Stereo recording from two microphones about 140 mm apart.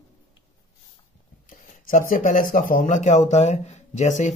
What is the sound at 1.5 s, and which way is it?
Speech, 70° left (ahead or behind).